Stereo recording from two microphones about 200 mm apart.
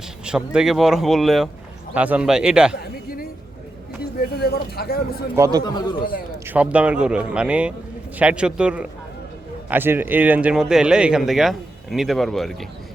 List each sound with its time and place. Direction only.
0.3 s speech: 5° right (ahead or behind)
4.2 s speech: 50° left (ahead or behind)
5.4 s speech: 20° right (ahead or behind)
5.6 s speech: 20° left (ahead or behind)
6.4 s a man's voice: 10° right (ahead or behind)